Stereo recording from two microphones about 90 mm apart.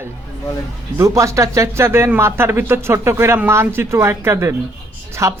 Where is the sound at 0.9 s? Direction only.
35° right (ahead or behind).